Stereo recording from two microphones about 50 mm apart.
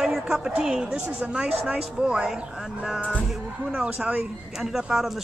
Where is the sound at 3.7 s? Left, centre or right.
Centre.